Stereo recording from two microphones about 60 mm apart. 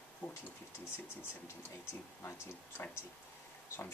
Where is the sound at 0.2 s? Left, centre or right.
Centre.